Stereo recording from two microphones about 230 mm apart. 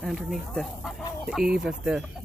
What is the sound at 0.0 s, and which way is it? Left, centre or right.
Speech, centre.